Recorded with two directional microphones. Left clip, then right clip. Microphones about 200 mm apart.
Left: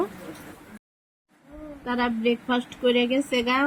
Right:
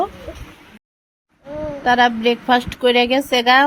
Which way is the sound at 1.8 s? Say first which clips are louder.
Right 11 dB; 40° right (ahead or behind).